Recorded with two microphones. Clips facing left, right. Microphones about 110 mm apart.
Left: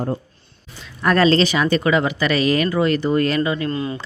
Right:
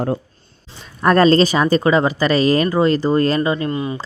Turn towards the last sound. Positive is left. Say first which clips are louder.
# right 2 dB
turn(degrees=-15)  # may be behind; listen again after turning